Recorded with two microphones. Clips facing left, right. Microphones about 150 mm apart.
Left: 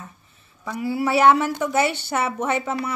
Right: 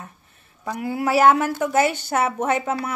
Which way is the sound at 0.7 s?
50° right (ahead or behind).